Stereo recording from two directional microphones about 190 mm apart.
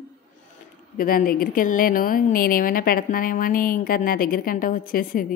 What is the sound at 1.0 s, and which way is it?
Speech, 50° left (ahead or behind).